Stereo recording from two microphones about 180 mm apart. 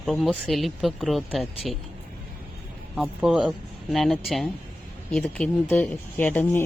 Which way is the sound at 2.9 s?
5° right (ahead or behind).